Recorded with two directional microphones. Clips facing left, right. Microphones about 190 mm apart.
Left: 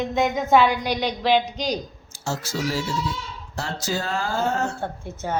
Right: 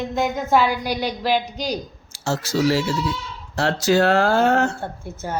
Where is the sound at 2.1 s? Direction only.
80° right.